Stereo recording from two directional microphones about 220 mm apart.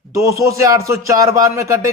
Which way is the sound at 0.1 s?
15° right (ahead or behind).